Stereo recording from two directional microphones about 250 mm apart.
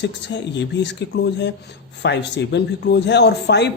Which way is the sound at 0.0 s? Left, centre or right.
Left.